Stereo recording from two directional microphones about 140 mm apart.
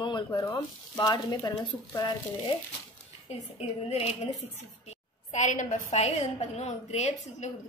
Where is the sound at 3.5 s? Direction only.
45° left (ahead or behind).